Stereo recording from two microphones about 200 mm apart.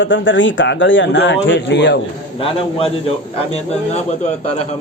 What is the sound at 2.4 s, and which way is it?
A man's voice, 30° left (ahead or behind).